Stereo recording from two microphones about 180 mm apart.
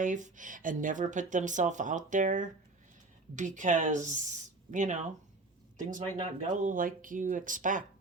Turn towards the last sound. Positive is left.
turn(degrees=-45)  # may be behind; listen again after turning